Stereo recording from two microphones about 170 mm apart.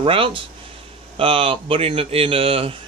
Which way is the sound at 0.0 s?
30° right (ahead or behind).